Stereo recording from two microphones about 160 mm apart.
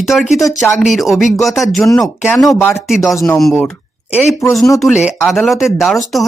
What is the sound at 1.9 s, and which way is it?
Speech, 25° left (ahead or behind).